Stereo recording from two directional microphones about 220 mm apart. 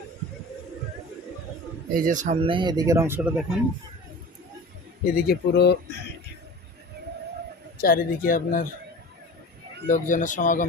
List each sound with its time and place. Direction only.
1.9 s speech: 40° right (ahead or behind); by 3.6 s 5° right (ahead or behind)
5.1 s speech: 45° left (ahead or behind)
7.8 s speech: 40° left (ahead or behind)
9.8 s speech: 35° left (ahead or behind)